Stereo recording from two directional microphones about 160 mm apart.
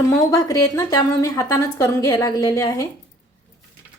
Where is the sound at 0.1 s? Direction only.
20° left (ahead or behind).